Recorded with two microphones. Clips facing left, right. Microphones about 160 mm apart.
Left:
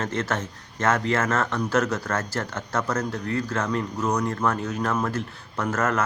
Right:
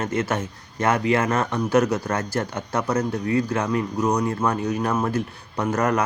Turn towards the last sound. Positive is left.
turn(degrees=-15)  # may be behind; listen again after turning